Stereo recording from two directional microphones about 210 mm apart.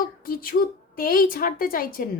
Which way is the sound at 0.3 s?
45° left (ahead or behind).